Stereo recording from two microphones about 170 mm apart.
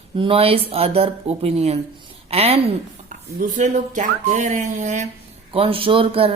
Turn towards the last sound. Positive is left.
turn(degrees=-30)  # may be behind; listen again after turning